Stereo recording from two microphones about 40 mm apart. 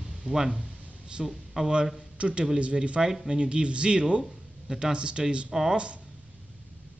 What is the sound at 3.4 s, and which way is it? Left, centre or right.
Speech, right.